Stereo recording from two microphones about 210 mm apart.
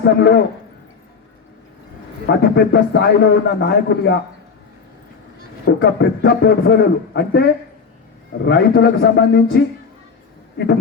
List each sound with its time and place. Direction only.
0.0 s a man's voice: 55° left (ahead or behind)
2.2 s a man's voice: 55° left (ahead or behind)
5.6 s a man's voice: 50° left (ahead or behind)